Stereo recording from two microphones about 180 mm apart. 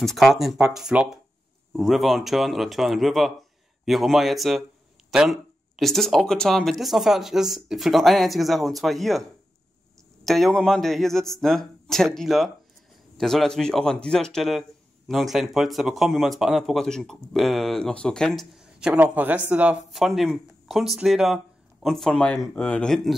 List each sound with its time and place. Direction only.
0.0 s speech: centre (ahead or behind)
10.2 s speech: centre (ahead or behind)